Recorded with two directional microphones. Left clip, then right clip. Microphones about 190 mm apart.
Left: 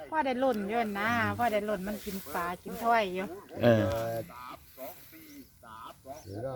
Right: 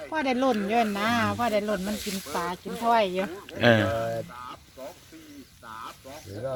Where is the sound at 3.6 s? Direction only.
10° left (ahead or behind).